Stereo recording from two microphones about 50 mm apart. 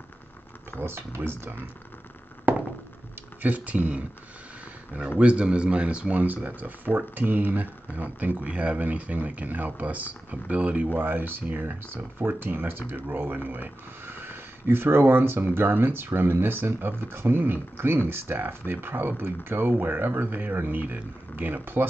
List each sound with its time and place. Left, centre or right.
0.7 s speech: right
2.5 s a sound: right
3.4 s speech: right
5.2 s speech: right
6.2 s speech: right